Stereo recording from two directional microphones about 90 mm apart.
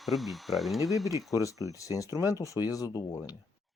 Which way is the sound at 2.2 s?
40° left (ahead or behind).